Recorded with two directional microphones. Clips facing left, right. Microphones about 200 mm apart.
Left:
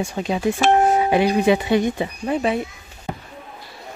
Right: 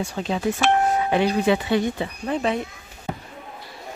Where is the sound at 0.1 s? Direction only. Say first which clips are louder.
Left 3 dB; 15° left (ahead or behind).